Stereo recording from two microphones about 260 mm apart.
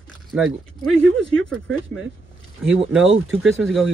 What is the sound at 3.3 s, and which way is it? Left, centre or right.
Speech, centre.